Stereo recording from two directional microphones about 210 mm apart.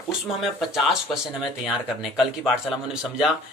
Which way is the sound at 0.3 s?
Centre (ahead or behind).